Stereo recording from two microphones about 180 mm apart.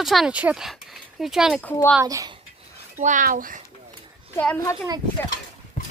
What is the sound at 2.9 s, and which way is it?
Speech, 45° right (ahead or behind).